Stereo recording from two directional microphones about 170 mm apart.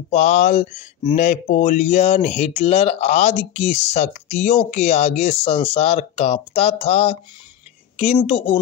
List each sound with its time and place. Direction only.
0.1 s speech: 45° left (ahead or behind)
8.3 s speech: 35° left (ahead or behind)